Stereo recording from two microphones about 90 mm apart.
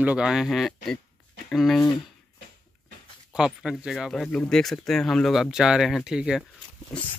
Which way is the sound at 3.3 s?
5° right (ahead or behind).